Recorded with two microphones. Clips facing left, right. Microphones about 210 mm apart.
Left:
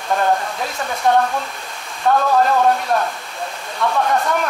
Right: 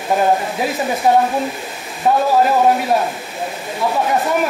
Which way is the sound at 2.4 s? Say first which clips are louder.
Right 2 dB; 10° right (ahead or behind).